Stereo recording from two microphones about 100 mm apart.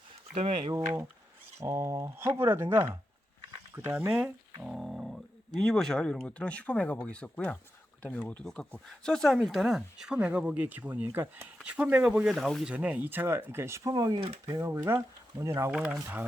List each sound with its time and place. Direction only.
0.3 s speech: 70° right (ahead or behind)
1.5 s speech: 25° right (ahead or behind)
4.6 s speech: 5° right (ahead or behind); by 11.4 s 20° right (ahead or behind)
11.6 s speech: 10° right (ahead or behind)
12.7 s speech: 15° right (ahead or behind); by 13.9 s 30° right (ahead or behind)
13.9 s speech: 45° right (ahead or behind)
14.6 s speech: 25° right (ahead or behind)
15.7 s speech: 10° right (ahead or behind)